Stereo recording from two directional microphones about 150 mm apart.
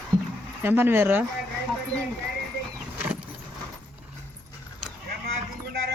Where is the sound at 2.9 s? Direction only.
10° right (ahead or behind).